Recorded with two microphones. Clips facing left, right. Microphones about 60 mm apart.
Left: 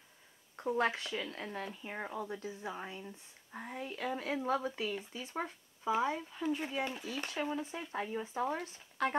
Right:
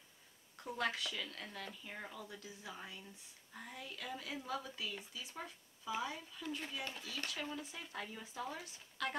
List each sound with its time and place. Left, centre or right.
0.6 s speech: left